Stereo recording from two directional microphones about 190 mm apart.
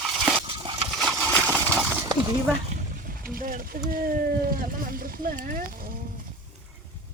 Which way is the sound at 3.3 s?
50° right (ahead or behind).